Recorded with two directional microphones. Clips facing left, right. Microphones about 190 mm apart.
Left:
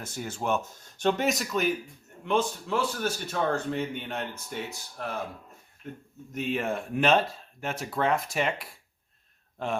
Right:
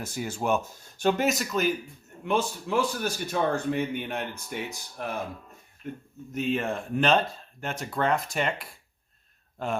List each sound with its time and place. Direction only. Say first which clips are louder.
0.0 s speech: right 3 dB; 10° right (ahead or behind)
6.3 s speech: right 2 dB; centre (ahead or behind)